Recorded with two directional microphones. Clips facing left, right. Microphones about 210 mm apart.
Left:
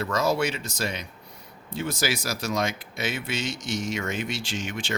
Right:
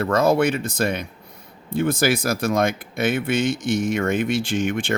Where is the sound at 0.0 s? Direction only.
55° right (ahead or behind).